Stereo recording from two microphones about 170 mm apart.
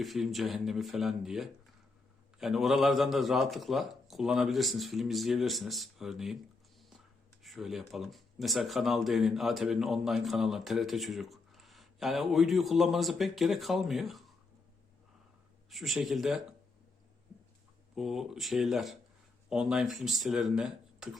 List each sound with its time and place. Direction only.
0.0 s speech: centre (ahead or behind)
7.4 s speech: centre (ahead or behind)
15.7 s speech: centre (ahead or behind)
17.9 s speech: centre (ahead or behind)